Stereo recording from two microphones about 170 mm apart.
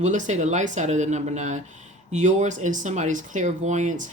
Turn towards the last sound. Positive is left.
turn(degrees=-45)  # may be behind; listen again after turning